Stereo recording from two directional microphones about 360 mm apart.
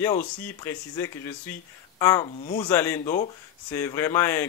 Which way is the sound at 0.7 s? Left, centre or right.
Centre.